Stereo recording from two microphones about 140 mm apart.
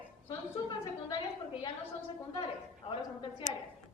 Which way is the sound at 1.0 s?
30° left (ahead or behind).